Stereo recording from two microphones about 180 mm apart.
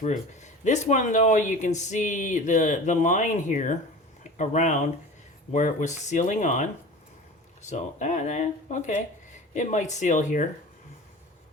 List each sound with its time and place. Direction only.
0.0 s speech: 40° left (ahead or behind)
7.7 s speech: 40° left (ahead or behind)